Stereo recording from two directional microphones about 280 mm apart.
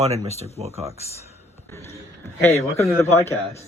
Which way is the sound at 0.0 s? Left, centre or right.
Right.